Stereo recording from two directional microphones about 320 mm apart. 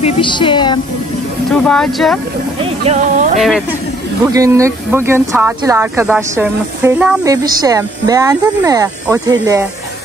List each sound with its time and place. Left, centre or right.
0.0 s a woman's voice: centre
1.5 s speech: centre
2.6 s music: centre
3.3 s speech: centre